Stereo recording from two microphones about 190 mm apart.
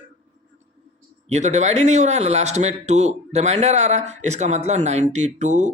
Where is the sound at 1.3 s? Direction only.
35° right (ahead or behind).